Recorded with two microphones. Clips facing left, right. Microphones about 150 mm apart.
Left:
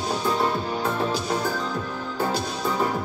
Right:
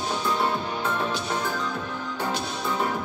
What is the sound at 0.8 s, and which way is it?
Music, 35° left (ahead or behind).